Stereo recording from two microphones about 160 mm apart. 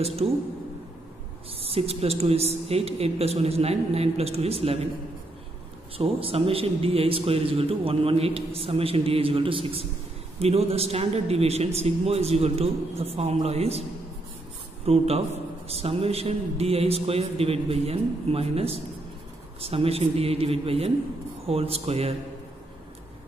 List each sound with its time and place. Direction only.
0.0 s speech: 40° right (ahead or behind)
1.6 s speech: 40° right (ahead or behind)
5.9 s speech: 35° right (ahead or behind)
14.9 s speech: 40° right (ahead or behind)